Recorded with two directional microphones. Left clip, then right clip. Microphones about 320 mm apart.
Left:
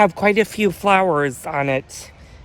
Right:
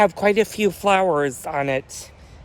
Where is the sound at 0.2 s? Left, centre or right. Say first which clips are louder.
Left 1 dB; left.